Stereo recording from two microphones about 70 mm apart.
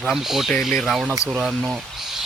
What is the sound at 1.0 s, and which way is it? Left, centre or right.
Speech, centre.